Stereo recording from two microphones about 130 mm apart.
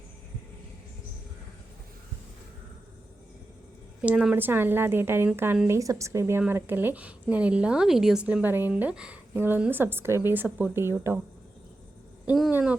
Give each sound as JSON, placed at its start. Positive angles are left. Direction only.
{"t": 4.0, "sound": "a woman's voice", "side_deg": -10}
{"t": 12.5, "sound": "a woman's voice", "side_deg": -15}